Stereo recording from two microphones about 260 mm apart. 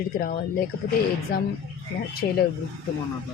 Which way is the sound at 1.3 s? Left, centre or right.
Left.